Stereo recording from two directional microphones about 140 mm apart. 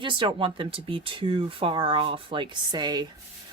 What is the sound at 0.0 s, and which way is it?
Speech, 35° right (ahead or behind).